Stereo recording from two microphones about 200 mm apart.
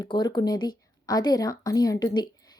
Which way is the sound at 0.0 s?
20° left (ahead or behind).